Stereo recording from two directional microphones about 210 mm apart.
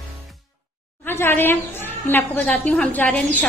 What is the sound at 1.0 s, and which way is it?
A woman's voice, 10° left (ahead or behind).